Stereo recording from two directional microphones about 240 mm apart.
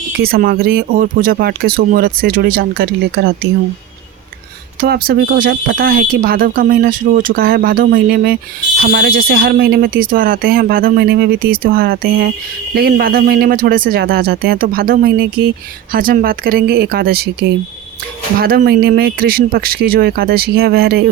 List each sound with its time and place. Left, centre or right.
0.2 s speech: right
4.8 s speech: right